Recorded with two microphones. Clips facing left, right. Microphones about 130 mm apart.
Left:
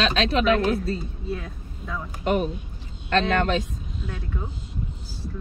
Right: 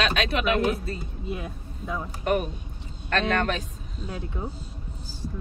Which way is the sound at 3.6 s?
35° right (ahead or behind).